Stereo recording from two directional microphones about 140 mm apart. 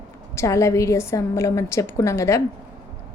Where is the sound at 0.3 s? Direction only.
20° left (ahead or behind).